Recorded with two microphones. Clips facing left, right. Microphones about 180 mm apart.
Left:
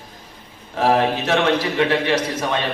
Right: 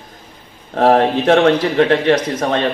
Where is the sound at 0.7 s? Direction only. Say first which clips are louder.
Right 5 dB; 55° right (ahead or behind).